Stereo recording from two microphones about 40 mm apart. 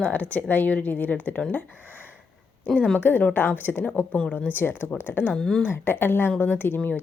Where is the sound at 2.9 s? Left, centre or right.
Left.